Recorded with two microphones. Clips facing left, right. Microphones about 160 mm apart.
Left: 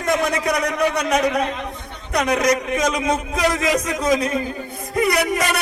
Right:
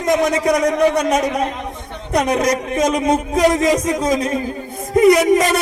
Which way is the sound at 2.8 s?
50° right (ahead or behind).